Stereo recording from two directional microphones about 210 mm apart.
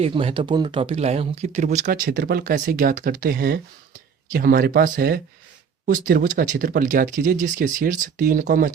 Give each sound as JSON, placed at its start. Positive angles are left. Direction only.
{"t": 0.0, "sound": "speech", "side_deg": -25}